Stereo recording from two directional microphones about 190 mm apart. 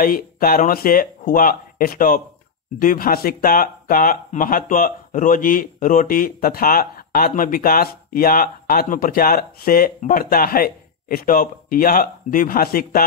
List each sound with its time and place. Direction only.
0.0 s speech: 50° left (ahead or behind)